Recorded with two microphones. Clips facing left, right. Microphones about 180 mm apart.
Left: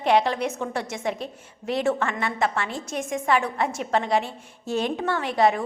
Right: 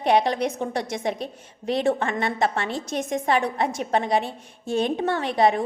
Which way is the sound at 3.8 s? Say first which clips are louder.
Even; 20° right (ahead or behind).